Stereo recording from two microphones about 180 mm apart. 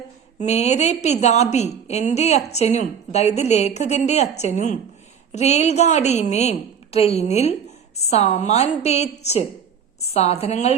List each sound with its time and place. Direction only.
0.3 s a woman's voice: 40° left (ahead or behind)